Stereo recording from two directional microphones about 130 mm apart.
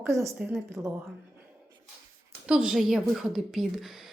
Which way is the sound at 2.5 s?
5° right (ahead or behind).